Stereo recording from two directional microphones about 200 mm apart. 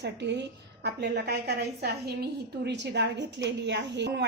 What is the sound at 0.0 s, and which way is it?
A woman's voice, 60° right (ahead or behind).